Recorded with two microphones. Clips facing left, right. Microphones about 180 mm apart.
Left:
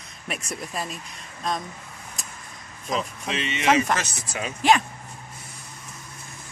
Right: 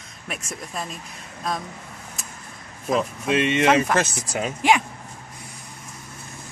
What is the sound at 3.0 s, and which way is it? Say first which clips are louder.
Speech: right 11 dB; 55° right (ahead or behind).